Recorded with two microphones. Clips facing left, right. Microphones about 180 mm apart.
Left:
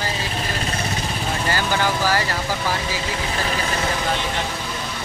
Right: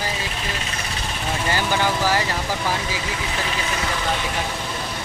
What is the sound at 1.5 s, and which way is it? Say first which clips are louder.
Speech: even; 15° right (ahead or behind).